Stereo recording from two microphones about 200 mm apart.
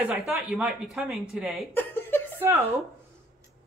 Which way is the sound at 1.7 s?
10° left (ahead or behind).